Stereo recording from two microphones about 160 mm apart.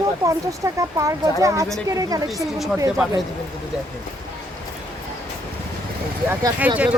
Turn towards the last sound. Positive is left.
turn(degrees=-10)  # may be behind; listen again after turning